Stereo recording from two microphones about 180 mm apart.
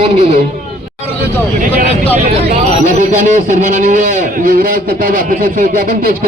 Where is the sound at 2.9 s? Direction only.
45° right (ahead or behind).